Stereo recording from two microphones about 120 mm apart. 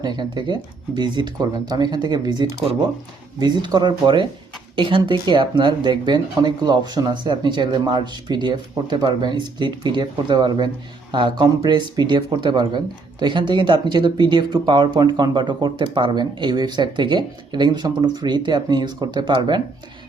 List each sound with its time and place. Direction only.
0.0 s speech: 35° right (ahead or behind)